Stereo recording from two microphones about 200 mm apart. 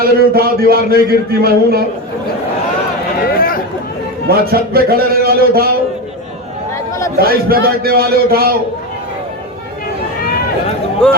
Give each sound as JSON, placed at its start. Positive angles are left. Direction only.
{"t": 0.0, "sound": "a man's voice", "side_deg": -50}
{"t": 3.2, "sound": "chatter", "side_deg": 45}
{"t": 4.3, "sound": "a man's voice", "side_deg": -50}
{"t": 7.2, "sound": "a man's voice", "side_deg": -50}
{"t": 11.0, "sound": "speech", "side_deg": 5}